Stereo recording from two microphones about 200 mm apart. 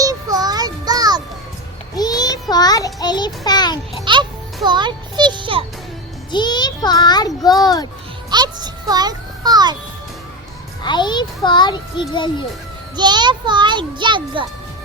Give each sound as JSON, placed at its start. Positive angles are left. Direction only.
{"t": 0.0, "sound": "child singing", "side_deg": -15}
{"t": 2.0, "sound": "child singing", "side_deg": 20}
{"t": 4.0, "sound": "music", "side_deg": -25}
{"t": 6.3, "sound": "a child's voice", "side_deg": 20}
{"t": 8.3, "sound": "music", "side_deg": -20}
{"t": 10.8, "sound": "a child's voice", "side_deg": 20}
{"t": 13.0, "sound": "a child's voice", "side_deg": -20}